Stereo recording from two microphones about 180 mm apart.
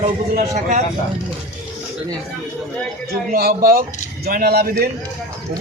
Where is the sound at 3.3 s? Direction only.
55° right (ahead or behind).